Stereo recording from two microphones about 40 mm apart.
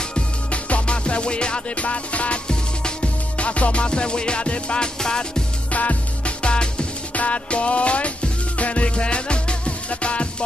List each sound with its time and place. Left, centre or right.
0.1 s music: left
1.8 s music: left
6.4 s music: left